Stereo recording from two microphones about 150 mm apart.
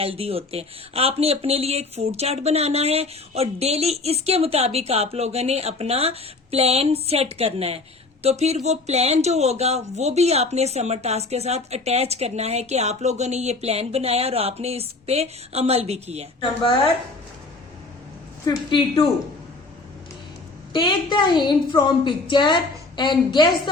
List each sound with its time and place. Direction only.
0.0 s speech: 40° right (ahead or behind)
18.4 s a woman's voice: 35° left (ahead or behind)
20.7 s a woman's voice: 35° left (ahead or behind)